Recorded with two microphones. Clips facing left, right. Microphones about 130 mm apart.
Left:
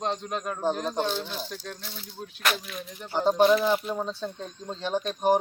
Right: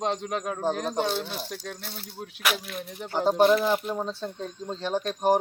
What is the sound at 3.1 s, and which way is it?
Speech, 10° right (ahead or behind).